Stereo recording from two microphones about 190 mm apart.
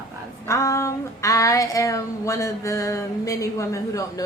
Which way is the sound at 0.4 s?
15° left (ahead or behind).